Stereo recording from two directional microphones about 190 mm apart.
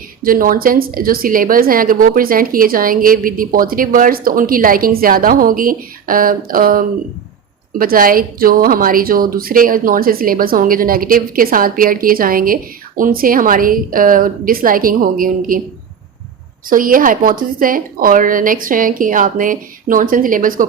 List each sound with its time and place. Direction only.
0.2 s a woman's voice: 50° right (ahead or behind)
16.6 s a woman's voice: 45° right (ahead or behind)